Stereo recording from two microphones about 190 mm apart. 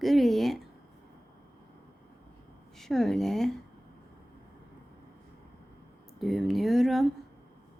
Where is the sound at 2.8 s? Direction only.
Centre (ahead or behind).